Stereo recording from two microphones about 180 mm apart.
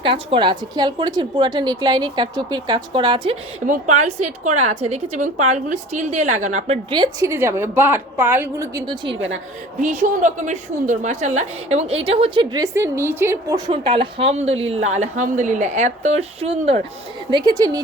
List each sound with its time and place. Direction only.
0.0 s a woman's voice: 30° right (ahead or behind)
3.7 s a woman's voice: 40° right (ahead or behind)
6.9 s a woman's voice: 20° right (ahead or behind)
9.8 s a woman's voice: 45° right (ahead or behind)
17.3 s a woman's voice: 25° right (ahead or behind)